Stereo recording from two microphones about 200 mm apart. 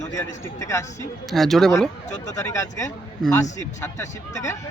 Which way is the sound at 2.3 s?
15° left (ahead or behind).